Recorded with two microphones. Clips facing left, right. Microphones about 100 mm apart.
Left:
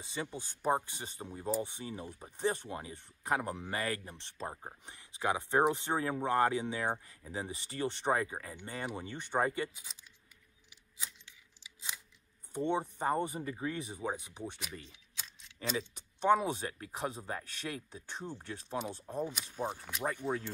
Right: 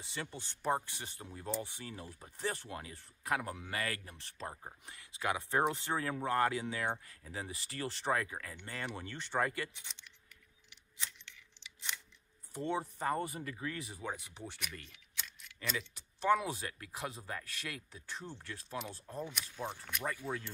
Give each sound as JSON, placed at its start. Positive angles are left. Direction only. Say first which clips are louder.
{"t": 0.0, "sound": "speech", "louder": "left 4 dB", "side_deg": 15}
{"t": 12.5, "sound": "speech", "louder": "left 4 dB", "side_deg": 20}
{"t": 16.2, "sound": "speech", "louder": "left 3 dB", "side_deg": 25}